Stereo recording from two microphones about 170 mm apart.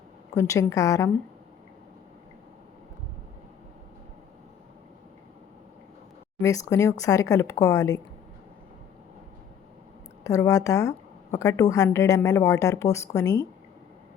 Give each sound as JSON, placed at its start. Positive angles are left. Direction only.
{"t": 0.3, "sound": "a woman's voice", "side_deg": 20}
{"t": 6.7, "sound": "a woman's voice", "side_deg": 15}
{"t": 10.2, "sound": "a woman's voice", "side_deg": 20}